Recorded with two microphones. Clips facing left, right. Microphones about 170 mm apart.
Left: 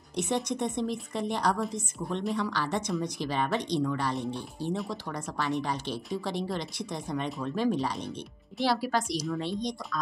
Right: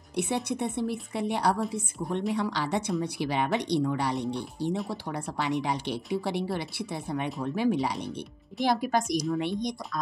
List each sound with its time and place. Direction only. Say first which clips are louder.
0.1 s speech: right 1 dB; 10° right (ahead or behind)
4.7 s speech: right 2 dB; centre (ahead or behind)
5.4 s speech: right 2 dB; 15° right (ahead or behind)